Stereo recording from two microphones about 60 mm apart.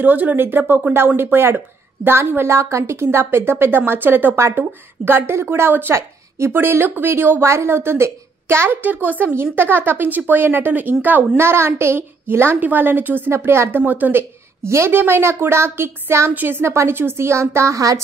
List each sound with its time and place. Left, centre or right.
0.0 s a woman's voice: right
8.8 s a woman's voice: right
11.3 s a woman's voice: right
12.5 s a woman's voice: right
14.6 s a woman's voice: right
16.3 s a woman's voice: right
17.7 s a woman's voice: right